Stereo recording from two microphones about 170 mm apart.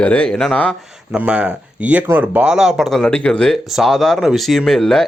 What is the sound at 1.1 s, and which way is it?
Speech, 5° right (ahead or behind).